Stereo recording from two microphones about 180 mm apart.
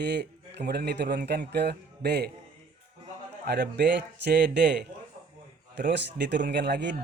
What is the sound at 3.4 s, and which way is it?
Speech, 65° right (ahead or behind).